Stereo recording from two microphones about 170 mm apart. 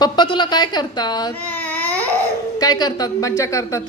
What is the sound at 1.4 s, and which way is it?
Baby cry, 10° left (ahead or behind).